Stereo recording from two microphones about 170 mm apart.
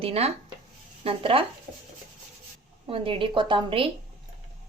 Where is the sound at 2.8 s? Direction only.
30° right (ahead or behind).